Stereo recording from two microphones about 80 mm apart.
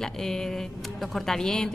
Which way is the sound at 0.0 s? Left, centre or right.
Centre.